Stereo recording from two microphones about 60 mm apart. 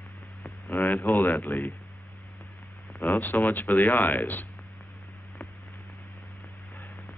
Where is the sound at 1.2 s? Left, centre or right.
Left.